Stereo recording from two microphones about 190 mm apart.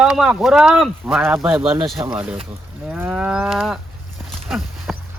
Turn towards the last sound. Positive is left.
turn(degrees=0)  # may be behind; listen again after turning